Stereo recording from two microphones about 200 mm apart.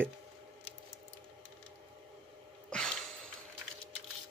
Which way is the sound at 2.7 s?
5° left (ahead or behind).